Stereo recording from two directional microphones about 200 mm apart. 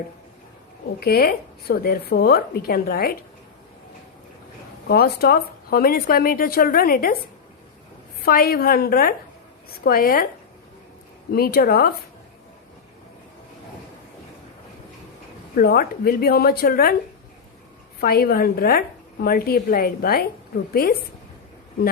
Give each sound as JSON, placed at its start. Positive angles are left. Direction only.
{"t": 0.9, "sound": "a woman's voice", "side_deg": 50}
{"t": 4.9, "sound": "a woman's voice", "side_deg": 50}
{"t": 8.2, "sound": "a woman's voice", "side_deg": 50}
{"t": 11.3, "sound": "a woman's voice", "side_deg": 50}
{"t": 15.5, "sound": "a woman's voice", "side_deg": 50}
{"t": 18.0, "sound": "a woman's voice", "side_deg": 50}